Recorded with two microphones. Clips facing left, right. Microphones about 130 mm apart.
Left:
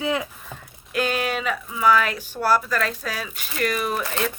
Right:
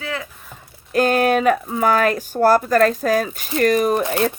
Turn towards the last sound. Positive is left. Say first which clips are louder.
# right 8 dB
turn(degrees=-40)  # may be behind; listen again after turning